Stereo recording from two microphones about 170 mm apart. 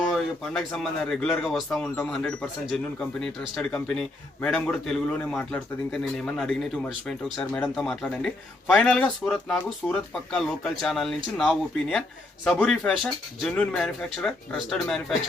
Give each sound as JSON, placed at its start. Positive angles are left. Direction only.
{"t": 0.1, "sound": "speech", "side_deg": 0}